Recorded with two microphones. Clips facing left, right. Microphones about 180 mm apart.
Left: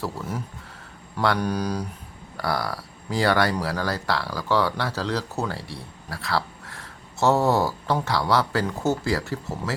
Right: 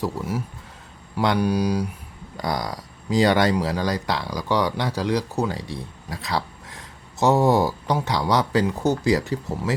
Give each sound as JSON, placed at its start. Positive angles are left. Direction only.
{"t": 0.0, "sound": "speech", "side_deg": -10}